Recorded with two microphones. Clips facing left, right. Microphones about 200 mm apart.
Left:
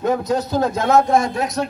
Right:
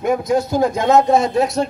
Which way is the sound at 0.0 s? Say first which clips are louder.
Right 2 dB; 10° right (ahead or behind).